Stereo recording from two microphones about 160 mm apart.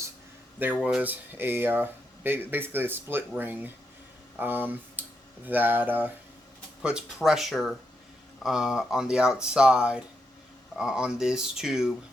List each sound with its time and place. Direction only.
0.8 s speech: 5° right (ahead or behind)